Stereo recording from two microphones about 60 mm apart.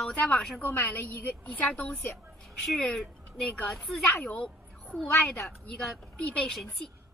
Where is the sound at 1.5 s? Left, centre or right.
Left.